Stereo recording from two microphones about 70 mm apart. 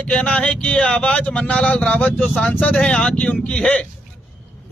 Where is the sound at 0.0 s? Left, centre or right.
Centre.